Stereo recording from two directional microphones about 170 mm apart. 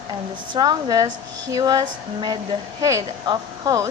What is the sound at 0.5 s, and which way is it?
A woman's voice, 25° right (ahead or behind).